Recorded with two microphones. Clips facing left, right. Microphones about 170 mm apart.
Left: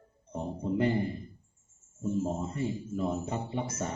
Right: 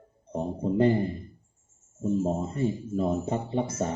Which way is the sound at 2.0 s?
30° right (ahead or behind).